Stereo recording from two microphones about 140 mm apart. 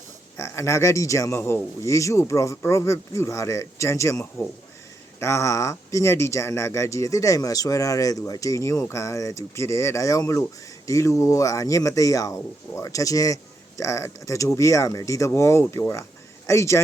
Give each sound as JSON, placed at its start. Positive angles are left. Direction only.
{"t": 0.3, "sound": "speech", "side_deg": 20}